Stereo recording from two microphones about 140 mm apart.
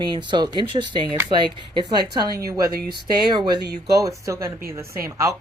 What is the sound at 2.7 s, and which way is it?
Speech, 90° right.